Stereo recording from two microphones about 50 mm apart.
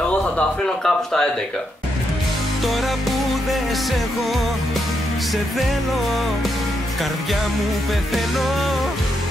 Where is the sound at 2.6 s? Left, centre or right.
Centre.